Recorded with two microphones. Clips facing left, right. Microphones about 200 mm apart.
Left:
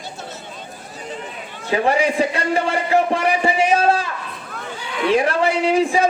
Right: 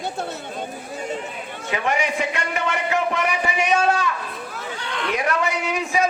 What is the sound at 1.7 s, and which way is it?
A man's voice, 35° left (ahead or behind).